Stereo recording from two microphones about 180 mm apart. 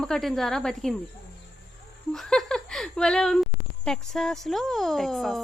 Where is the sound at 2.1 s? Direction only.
Centre (ahead or behind).